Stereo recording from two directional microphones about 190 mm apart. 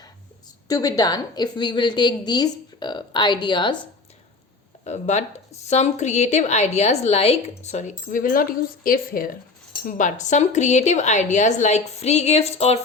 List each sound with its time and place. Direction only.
0.7 s a woman's voice: 20° left (ahead or behind)
4.8 s speech: 35° left (ahead or behind)